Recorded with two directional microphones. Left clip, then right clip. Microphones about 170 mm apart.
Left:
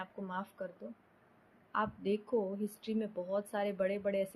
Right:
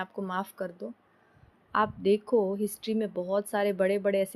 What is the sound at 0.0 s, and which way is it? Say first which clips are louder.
A woman's voice: right 8 dB; 70° right (ahead or behind).